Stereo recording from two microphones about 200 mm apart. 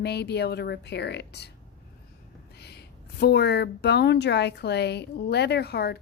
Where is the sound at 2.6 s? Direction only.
55° left (ahead or behind).